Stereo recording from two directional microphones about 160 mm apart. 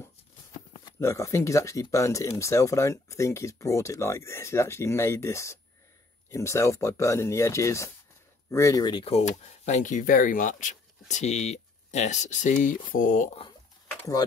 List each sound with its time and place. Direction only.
0.0 s speech: 20° left (ahead or behind); by 13.4 s 50° left (ahead or behind)